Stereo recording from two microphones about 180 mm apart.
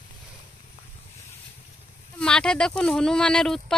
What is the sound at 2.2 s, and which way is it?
Speech, 5° left (ahead or behind).